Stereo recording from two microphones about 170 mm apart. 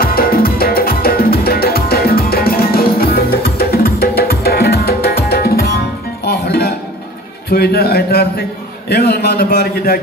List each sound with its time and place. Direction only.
0.0 s music: 60° left (ahead or behind)
7.4 s a man's voice: 65° left (ahead or behind)